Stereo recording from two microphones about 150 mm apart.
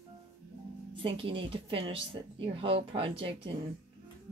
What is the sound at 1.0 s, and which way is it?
A woman's voice, 35° right (ahead or behind).